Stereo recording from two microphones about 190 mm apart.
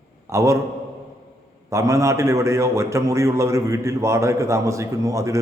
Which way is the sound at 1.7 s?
15° right (ahead or behind).